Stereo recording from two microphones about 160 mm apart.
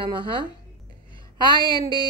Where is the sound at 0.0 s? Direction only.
30° right (ahead or behind).